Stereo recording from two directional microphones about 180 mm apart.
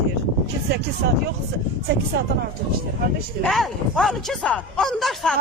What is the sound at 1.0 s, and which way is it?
Speech, 65° right (ahead or behind).